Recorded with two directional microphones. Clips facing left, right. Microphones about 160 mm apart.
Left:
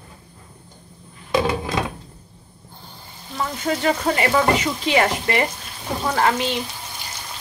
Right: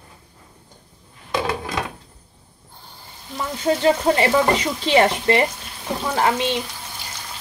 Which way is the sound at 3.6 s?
30° right (ahead or behind).